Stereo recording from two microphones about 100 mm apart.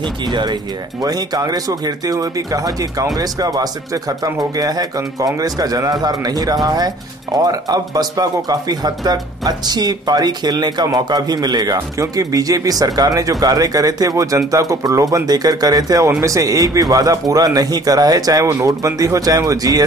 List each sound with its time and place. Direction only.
0.3 s speech: 50° right (ahead or behind)
1.0 s speech: 40° right (ahead or behind)